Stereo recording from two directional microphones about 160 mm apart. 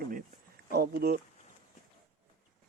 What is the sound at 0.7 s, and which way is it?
Speech, 85° right.